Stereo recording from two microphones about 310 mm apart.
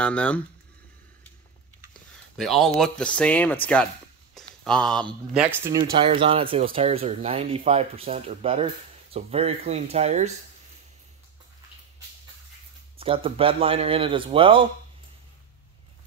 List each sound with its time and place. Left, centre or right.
0.0 s speech: centre
2.3 s speech: centre
5.9 s speech: centre
13.0 s speech: centre